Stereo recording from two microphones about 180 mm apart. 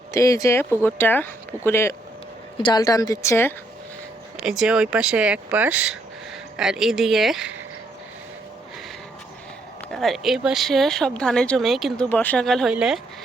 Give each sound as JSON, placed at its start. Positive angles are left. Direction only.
{"t": 0.1, "sound": "speech", "side_deg": 15}
{"t": 2.6, "sound": "speech", "side_deg": 25}
{"t": 4.4, "sound": "speech", "side_deg": -5}
{"t": 9.9, "sound": "speech", "side_deg": 0}